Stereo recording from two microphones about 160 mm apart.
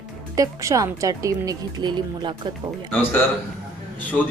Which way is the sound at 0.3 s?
20° right (ahead or behind).